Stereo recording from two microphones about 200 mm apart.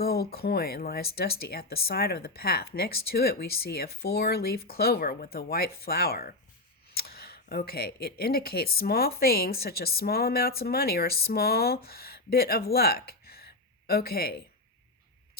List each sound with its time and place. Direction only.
0.0 s speech: 50° left (ahead or behind)